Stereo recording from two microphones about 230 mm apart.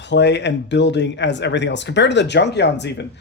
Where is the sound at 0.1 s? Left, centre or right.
Left.